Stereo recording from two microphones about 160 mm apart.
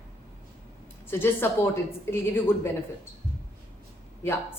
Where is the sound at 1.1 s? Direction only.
15° left (ahead or behind).